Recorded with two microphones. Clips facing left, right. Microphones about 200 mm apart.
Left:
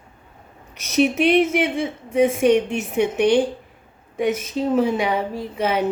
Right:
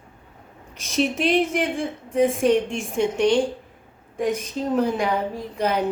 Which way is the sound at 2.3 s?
75° left (ahead or behind).